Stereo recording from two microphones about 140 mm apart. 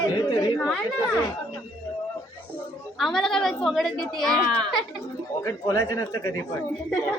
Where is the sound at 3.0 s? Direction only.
5° left (ahead or behind).